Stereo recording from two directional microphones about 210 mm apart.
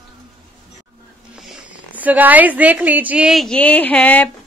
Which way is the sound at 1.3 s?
5° right (ahead or behind).